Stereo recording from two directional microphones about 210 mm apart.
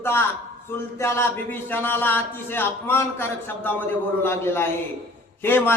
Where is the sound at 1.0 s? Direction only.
10° left (ahead or behind).